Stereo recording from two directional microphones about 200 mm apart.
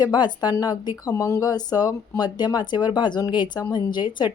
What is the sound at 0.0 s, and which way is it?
Speech, 20° left (ahead or behind).